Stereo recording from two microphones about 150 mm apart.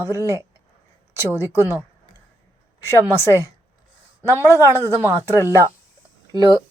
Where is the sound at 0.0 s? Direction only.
20° right (ahead or behind).